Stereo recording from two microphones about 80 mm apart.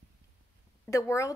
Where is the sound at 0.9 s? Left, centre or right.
Left.